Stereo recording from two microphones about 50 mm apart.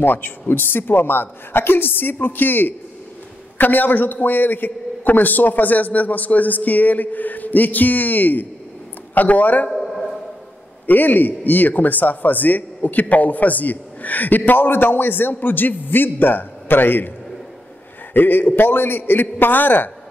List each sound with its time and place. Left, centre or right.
0.0 s a woman's voice: left
9.7 s a sound: centre
10.9 s speech: left
18.1 s speech: left